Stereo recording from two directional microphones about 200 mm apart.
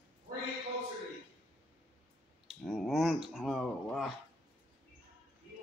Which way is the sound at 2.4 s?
Centre (ahead or behind).